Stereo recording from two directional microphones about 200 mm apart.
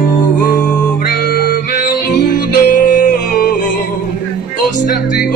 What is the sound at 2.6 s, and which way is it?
Yodeling, 40° left (ahead or behind).